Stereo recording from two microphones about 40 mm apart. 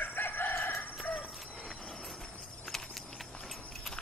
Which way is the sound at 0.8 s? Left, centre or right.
Left.